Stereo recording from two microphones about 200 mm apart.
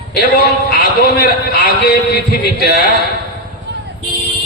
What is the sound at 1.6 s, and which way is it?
A man's voice, 55° left (ahead or behind).